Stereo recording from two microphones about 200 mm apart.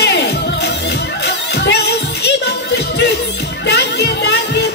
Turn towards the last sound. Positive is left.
turn(degrees=55)  # may be behind; listen again after turning